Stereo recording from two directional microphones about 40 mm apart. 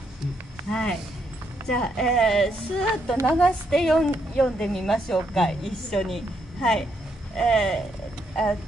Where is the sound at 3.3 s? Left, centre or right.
Left.